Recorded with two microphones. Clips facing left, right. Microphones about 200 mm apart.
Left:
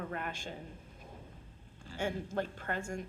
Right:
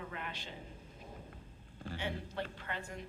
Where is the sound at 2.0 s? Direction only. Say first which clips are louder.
Left 6 dB; 45° left (ahead or behind).